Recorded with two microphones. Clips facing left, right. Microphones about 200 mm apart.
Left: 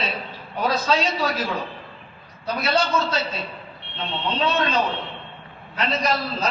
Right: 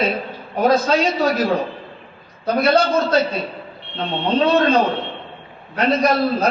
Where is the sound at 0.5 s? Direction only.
50° right (ahead or behind).